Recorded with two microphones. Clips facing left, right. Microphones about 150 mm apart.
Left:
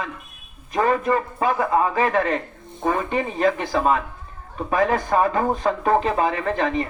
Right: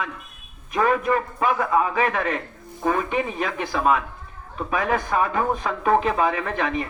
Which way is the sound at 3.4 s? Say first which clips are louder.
Left 6 dB; 50° left (ahead or behind).